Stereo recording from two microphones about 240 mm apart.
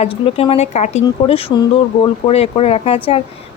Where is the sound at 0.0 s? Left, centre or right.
Left.